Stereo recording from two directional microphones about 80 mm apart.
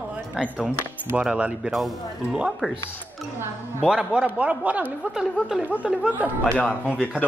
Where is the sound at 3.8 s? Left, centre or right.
Centre.